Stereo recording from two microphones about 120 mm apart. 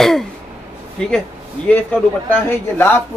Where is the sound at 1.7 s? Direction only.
15° left (ahead or behind).